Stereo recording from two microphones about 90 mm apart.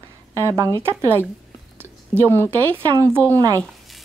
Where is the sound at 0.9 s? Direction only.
30° right (ahead or behind).